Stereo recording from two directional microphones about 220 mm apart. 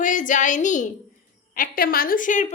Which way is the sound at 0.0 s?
35° left (ahead or behind).